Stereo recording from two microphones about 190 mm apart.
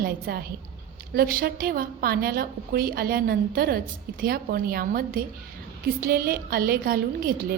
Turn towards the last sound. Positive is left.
turn(degrees=-50)  # may be behind; listen again after turning